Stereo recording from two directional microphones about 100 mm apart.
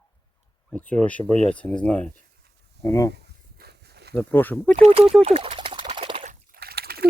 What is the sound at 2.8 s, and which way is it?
Speech, 30° left (ahead or behind).